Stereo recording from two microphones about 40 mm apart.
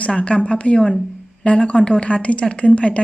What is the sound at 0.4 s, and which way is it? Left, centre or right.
Speech, left.